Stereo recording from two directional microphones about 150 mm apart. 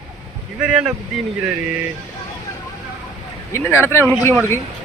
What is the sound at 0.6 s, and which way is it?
Speech, 5° right (ahead or behind).